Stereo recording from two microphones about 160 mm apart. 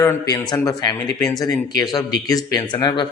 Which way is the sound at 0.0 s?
20° left (ahead or behind).